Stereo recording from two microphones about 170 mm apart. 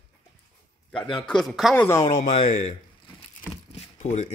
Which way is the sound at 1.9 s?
20° left (ahead or behind).